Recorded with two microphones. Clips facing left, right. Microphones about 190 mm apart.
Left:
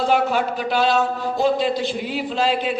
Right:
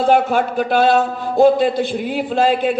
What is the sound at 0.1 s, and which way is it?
A man's voice, 50° right (ahead or behind).